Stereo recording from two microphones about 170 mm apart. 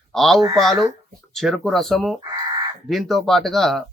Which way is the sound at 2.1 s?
20° right (ahead or behind).